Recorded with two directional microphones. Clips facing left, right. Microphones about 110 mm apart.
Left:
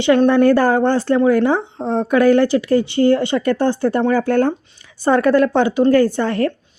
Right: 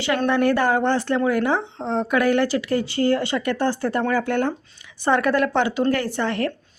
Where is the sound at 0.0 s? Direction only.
25° left (ahead or behind).